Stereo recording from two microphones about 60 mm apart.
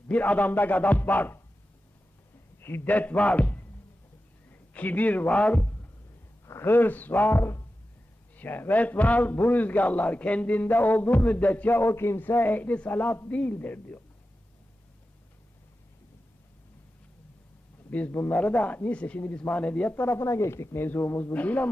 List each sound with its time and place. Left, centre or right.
0.1 s a man's voice: left
2.6 s a man's voice: left
4.7 s a man's voice: left
6.4 s a sound: left
6.7 s a man's voice: left
17.9 s a man's voice: left
19.9 s speech: left
20.1 s speech: left
20.8 s speech: left